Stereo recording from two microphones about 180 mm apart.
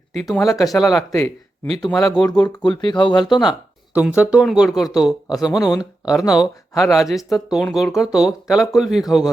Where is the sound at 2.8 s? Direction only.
25° left (ahead or behind).